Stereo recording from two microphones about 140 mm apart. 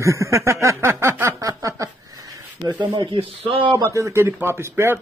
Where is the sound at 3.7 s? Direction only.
20° right (ahead or behind).